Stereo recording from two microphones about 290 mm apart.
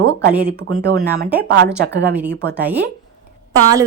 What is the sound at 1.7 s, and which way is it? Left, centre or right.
Speech, centre.